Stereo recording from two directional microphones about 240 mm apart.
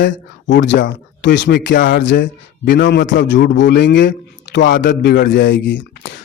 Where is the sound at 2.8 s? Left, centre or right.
Left.